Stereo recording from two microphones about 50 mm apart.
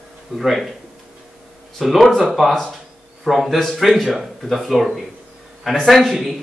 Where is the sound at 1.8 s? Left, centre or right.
Centre.